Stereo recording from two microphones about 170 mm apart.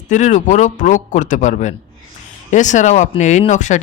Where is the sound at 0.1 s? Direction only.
45° left (ahead or behind).